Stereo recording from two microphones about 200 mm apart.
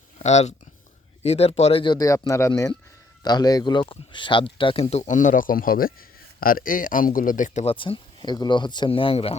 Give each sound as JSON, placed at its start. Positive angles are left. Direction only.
{"t": 0.2, "sound": "speech", "side_deg": 35}